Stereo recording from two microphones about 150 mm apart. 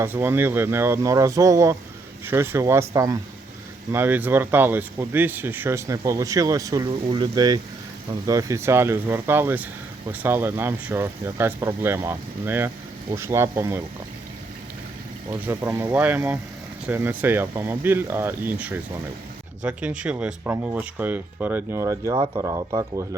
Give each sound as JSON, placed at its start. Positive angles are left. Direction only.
{"t": 0.0, "sound": "speech", "side_deg": -15}
{"t": 15.3, "sound": "speech", "side_deg": -15}